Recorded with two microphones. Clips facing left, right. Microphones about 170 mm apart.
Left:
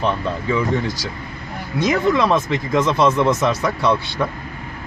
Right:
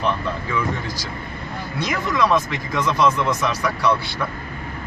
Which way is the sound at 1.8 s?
25° left (ahead or behind).